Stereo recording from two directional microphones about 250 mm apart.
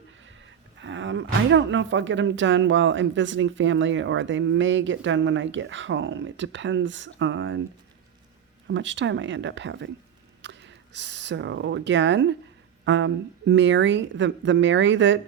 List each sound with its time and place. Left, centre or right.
0.8 s speech: right
8.6 s speech: right